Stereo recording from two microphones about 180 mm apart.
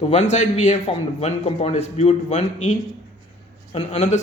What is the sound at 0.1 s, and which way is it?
Speech, 40° left (ahead or behind).